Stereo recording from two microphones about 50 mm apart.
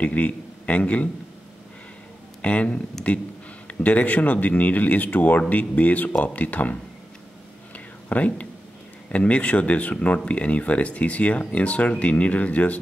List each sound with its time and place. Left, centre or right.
0.0 s a man's voice: left
2.4 s speech: left
7.7 s whispering: left
9.1 s speech: left